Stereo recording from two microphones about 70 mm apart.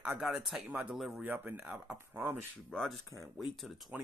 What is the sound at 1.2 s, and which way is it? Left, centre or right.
Speech, right.